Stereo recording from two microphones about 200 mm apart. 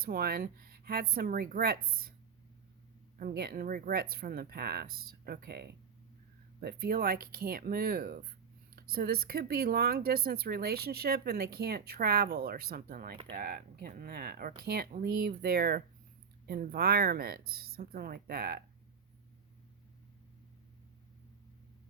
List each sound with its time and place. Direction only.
0.0 s speech: 50° right (ahead or behind)
3.2 s speech: 50° right (ahead or behind)